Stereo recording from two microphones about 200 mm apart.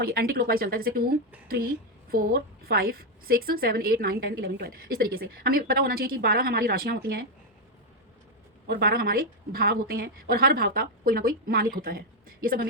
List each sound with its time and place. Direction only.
0.0 s a woman's voice: 50° right (ahead or behind)
8.6 s a woman's voice: 50° right (ahead or behind)